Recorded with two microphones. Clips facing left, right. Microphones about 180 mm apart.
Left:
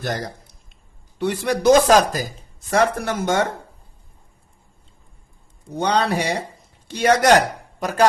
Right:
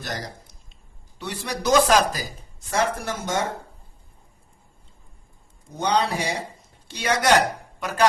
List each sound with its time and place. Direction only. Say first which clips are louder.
0.0 s speech: left 6 dB; 55° left (ahead or behind)
2.6 s speech: left 5 dB; 65° left (ahead or behind)
5.7 s a man's voice: left 3 dB; 65° left (ahead or behind)
6.8 s speech: left 6 dB; 50° left (ahead or behind)